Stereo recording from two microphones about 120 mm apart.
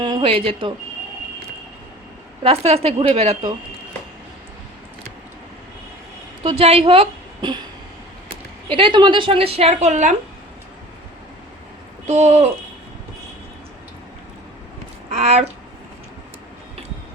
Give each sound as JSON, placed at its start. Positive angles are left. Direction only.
{"t": 0.0, "sound": "a woman's voice", "side_deg": -45}
{"t": 2.4, "sound": "a woman's voice", "side_deg": -55}
{"t": 6.6, "sound": "a woman's voice", "side_deg": -55}
{"t": 8.7, "sound": "a woman's voice", "side_deg": -45}
{"t": 12.0, "sound": "speech", "side_deg": -70}
{"t": 15.1, "sound": "speech", "side_deg": -65}